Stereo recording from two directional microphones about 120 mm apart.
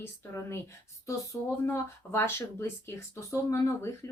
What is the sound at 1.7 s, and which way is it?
Speech, 20° left (ahead or behind).